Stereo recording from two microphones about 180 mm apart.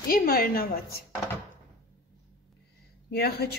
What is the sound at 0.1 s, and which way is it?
Speech, 55° left (ahead or behind).